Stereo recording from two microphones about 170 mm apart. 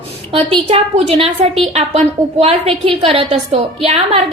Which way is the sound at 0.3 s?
35° right (ahead or behind).